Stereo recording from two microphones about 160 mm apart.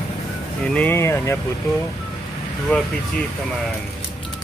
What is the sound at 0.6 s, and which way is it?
Speech, 10° left (ahead or behind).